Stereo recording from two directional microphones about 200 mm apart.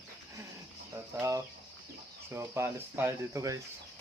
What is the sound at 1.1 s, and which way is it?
Speech, 15° right (ahead or behind).